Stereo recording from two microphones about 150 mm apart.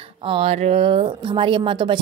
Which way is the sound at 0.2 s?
40° right (ahead or behind).